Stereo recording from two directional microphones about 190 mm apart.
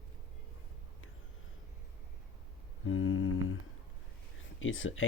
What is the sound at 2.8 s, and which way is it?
Humming, 90° left.